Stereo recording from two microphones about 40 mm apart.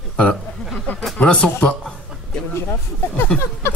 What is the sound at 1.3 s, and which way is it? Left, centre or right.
Speech, left.